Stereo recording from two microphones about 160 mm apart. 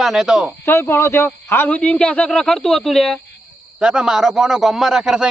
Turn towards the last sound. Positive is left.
turn(degrees=-5)  # may be behind; listen again after turning